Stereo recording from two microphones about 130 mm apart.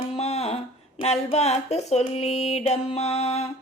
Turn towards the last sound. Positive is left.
turn(degrees=55)  # may be behind; listen again after turning